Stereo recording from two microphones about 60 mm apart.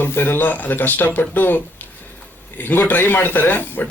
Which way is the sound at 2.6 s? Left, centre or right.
Left.